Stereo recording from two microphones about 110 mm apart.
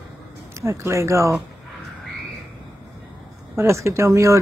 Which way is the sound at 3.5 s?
25° right (ahead or behind).